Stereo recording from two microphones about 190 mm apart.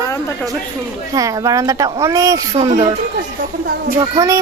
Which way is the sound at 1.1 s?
20° right (ahead or behind).